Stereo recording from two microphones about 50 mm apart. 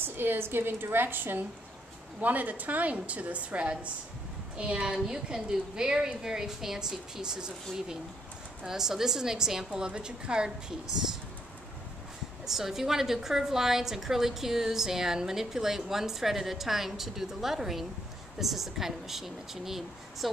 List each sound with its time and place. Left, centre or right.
0.0 s a woman's voice: right; by 10.5 s centre
12.4 s a woman's voice: centre